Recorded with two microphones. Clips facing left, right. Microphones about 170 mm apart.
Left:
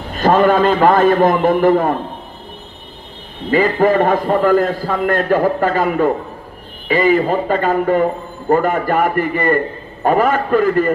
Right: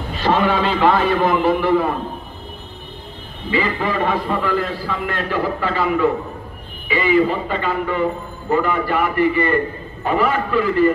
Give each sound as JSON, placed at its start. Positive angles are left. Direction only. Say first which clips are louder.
{"t": 0.1, "sound": "a man's voice", "louder": "left 6 dB", "side_deg": 50}
{"t": 3.4, "sound": "a man's voice", "louder": "left 7 dB", "side_deg": 50}